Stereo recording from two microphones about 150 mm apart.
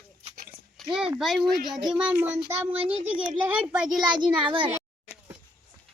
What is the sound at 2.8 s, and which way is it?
Speech, 40° right (ahead or behind).